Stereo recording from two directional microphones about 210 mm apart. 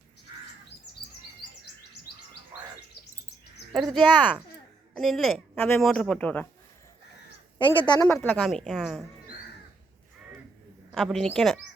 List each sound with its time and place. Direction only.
3.7 s a woman's voice: centre (ahead or behind)
7.6 s a woman's voice: 25° left (ahead or behind)
8.0 s a woman's voice: 10° left (ahead or behind)
8.4 s a woman's voice: centre (ahead or behind)
10.9 s a woman's voice: centre (ahead or behind)